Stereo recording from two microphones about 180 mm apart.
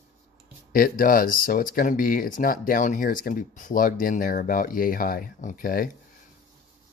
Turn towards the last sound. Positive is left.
turn(degrees=50)  # may be behind; listen again after turning